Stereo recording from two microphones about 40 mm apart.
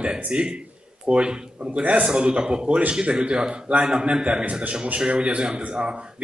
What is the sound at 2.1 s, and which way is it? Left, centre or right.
Speech, right.